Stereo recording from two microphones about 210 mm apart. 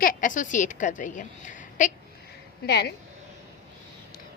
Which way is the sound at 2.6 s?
50° left (ahead or behind).